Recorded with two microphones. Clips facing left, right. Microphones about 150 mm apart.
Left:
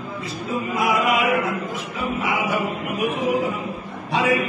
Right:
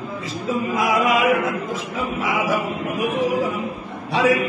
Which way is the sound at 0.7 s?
90° right.